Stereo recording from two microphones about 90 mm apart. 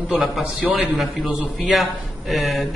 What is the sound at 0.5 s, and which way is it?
Speech, 15° right (ahead or behind).